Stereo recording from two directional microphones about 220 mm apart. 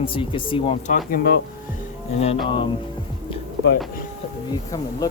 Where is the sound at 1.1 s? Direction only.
40° left (ahead or behind).